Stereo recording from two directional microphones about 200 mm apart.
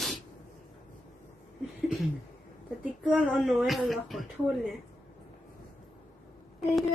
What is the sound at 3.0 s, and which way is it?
A woman's voice, 5° right (ahead or behind).